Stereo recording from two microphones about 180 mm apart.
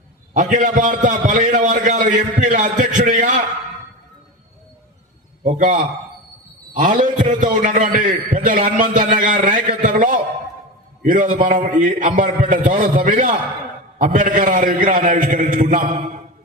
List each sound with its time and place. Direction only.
0.3 s a man's voice: 45° right (ahead or behind)
5.4 s a man's voice: 45° right (ahead or behind)